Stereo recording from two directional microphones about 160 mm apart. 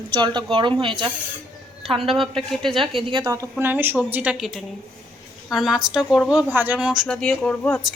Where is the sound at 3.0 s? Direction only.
25° right (ahead or behind); by 7.0 s 5° right (ahead or behind).